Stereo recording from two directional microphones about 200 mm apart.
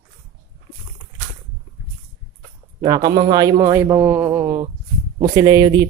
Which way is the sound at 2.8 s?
20° right (ahead or behind).